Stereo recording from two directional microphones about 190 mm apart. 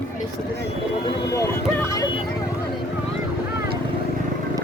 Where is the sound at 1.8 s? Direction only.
20° left (ahead or behind).